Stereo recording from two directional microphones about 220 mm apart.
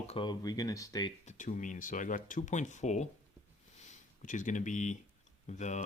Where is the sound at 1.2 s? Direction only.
35° left (ahead or behind).